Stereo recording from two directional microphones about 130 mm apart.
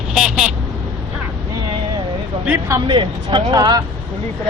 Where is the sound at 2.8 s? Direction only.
40° right (ahead or behind).